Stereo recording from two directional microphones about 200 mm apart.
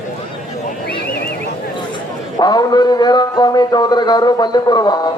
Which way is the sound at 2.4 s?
20° left (ahead or behind).